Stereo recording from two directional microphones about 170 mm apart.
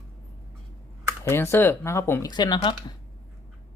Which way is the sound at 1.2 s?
15° left (ahead or behind).